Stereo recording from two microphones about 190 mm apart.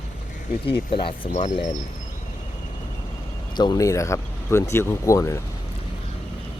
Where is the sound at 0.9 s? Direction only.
30° left (ahead or behind).